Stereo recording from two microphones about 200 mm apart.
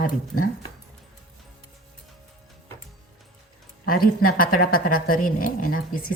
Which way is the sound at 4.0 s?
45° left (ahead or behind).